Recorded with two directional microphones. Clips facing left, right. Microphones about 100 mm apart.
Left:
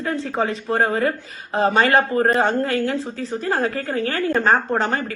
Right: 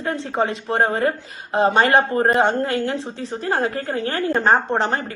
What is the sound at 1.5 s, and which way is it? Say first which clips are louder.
Speech: right 1 dB; 35° right (ahead or behind).